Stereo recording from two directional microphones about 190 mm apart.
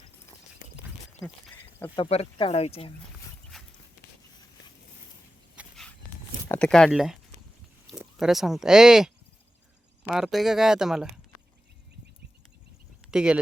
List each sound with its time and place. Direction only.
2.0 s speech: 30° left (ahead or behind)
5.5 s dog: centre (ahead or behind)
6.5 s speech: 5° left (ahead or behind)
13.1 s speech: 5° right (ahead or behind)